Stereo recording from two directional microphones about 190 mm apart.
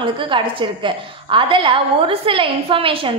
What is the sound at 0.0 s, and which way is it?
A woman's voice, 25° right (ahead or behind).